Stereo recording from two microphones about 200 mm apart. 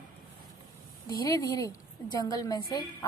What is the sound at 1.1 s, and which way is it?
A woman's voice, 20° left (ahead or behind).